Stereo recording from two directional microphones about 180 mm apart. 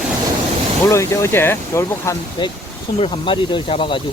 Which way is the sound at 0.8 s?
15° left (ahead or behind).